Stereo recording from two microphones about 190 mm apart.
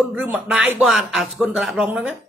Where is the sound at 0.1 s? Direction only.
5° right (ahead or behind).